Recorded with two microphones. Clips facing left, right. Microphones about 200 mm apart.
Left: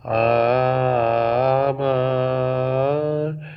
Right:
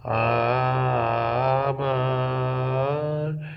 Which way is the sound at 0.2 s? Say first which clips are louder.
Left 7 dB; 35° left (ahead or behind).